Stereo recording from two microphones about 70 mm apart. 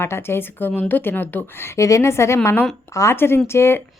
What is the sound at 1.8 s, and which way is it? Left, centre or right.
A woman's voice, left.